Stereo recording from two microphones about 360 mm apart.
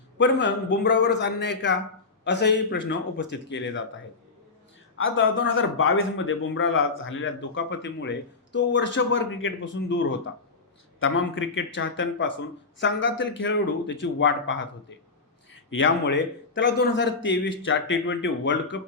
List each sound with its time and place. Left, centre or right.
0.2 s a man's voice: left